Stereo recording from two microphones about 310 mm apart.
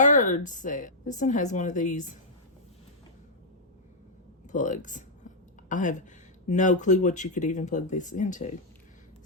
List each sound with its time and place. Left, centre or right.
0.0 s a woman's voice: left
4.5 s a woman's voice: left